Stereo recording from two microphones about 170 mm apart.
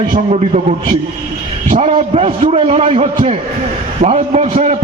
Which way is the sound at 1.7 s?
40° right (ahead or behind).